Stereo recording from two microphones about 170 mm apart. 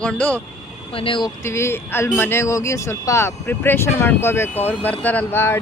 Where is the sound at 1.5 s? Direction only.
15° left (ahead or behind).